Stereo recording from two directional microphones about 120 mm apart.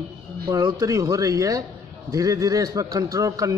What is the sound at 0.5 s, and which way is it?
A man's voice, 35° right (ahead or behind).